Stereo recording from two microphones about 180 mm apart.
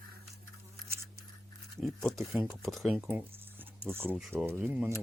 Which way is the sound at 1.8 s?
Centre (ahead or behind).